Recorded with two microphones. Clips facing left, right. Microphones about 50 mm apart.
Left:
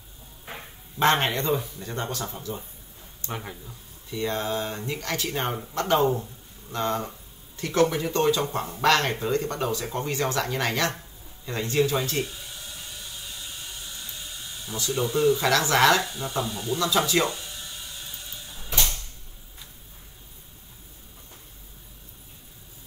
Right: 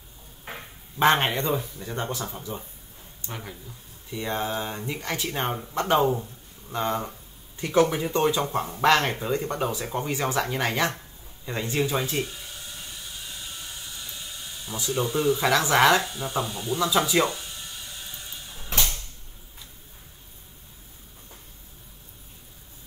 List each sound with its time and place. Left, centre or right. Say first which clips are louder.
0.9 s speech: right 1 dB; centre
3.3 s speech: left 3 dB; centre
4.1 s speech: left 1 dB; centre
14.9 s speech: left 2 dB; centre